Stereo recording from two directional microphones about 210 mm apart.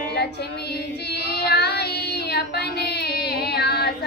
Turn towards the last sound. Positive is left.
turn(degrees=50)  # may be behind; listen again after turning